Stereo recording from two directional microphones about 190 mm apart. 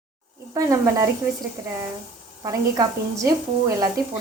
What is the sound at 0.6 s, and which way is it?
Speech, 15° right (ahead or behind).